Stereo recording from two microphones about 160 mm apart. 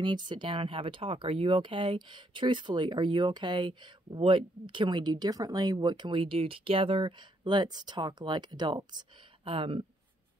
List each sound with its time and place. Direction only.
0.0 s speech: 30° right (ahead or behind)